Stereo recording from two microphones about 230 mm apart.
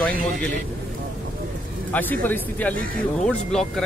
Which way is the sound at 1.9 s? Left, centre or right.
Centre.